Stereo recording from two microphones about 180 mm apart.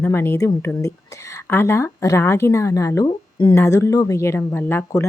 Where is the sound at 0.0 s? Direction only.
15° left (ahead or behind).